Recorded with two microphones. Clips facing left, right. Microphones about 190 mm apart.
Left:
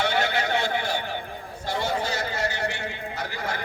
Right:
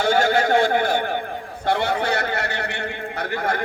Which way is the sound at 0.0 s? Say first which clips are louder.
Right 6 dB; 45° right (ahead or behind).